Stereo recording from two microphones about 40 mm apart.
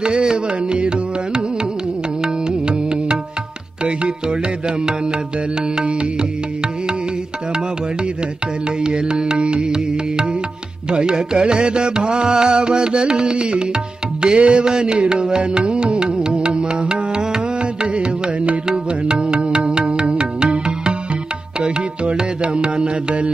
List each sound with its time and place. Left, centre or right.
0.0 s music: right
8.8 s music: right